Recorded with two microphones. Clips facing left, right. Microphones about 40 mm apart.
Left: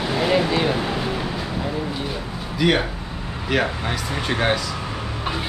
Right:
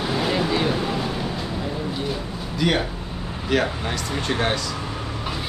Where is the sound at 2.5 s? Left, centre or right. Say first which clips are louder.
Left 3 dB; centre.